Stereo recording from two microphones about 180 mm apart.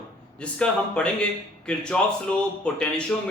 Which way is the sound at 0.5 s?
5° left (ahead or behind).